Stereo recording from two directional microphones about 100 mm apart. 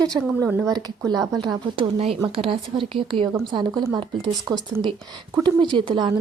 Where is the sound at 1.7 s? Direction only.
65° right (ahead or behind).